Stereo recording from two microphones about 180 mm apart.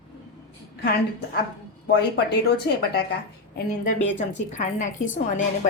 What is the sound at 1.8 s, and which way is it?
Speech, 60° left (ahead or behind).